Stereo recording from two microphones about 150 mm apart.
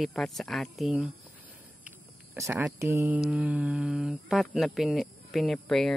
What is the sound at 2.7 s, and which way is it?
Speech, 20° right (ahead or behind).